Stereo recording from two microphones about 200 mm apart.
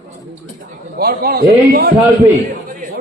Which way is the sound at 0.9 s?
50° right (ahead or behind).